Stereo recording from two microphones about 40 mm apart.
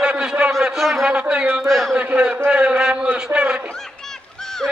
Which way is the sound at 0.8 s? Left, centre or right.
Centre.